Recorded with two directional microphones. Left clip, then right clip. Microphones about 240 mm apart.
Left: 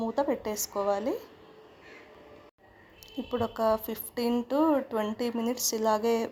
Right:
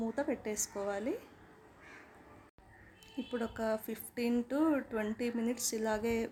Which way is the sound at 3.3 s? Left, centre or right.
Centre.